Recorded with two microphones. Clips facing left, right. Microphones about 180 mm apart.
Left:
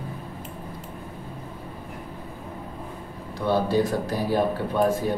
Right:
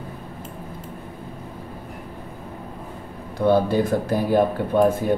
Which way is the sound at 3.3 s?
55° right (ahead or behind).